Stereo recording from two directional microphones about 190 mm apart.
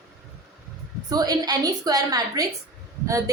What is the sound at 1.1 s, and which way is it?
A woman's voice, 20° right (ahead or behind).